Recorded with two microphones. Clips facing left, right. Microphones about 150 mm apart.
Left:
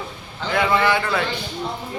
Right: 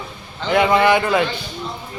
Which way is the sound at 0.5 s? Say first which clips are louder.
Right 5 dB; 20° right (ahead or behind).